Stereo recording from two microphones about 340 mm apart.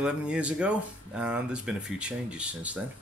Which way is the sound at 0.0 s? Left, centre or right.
Centre.